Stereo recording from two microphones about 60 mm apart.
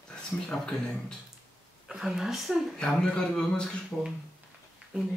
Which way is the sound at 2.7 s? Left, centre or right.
Centre.